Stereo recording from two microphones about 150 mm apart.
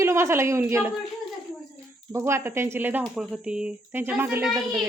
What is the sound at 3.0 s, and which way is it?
A woman's voice, centre (ahead or behind).